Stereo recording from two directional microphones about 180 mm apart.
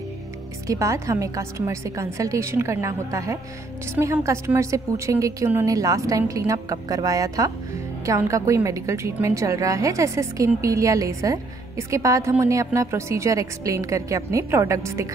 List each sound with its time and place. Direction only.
0.7 s a woman's voice: 15° right (ahead or behind)